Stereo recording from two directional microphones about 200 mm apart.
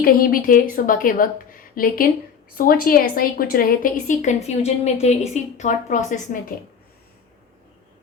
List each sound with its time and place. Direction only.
0.0 s a woman's voice: 45° left (ahead or behind)